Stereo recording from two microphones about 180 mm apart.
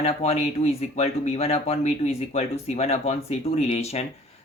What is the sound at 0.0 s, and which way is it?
Speech, 35° left (ahead or behind).